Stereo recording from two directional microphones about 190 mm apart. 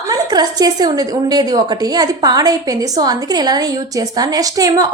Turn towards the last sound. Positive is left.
turn(degrees=-20)  # may be behind; listen again after turning